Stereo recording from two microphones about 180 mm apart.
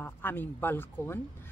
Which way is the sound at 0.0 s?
10° left (ahead or behind).